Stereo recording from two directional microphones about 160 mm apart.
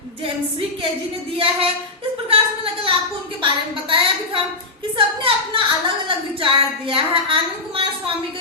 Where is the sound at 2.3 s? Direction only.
35° right (ahead or behind).